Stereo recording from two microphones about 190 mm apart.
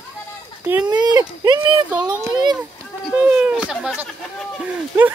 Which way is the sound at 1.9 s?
5° right (ahead or behind).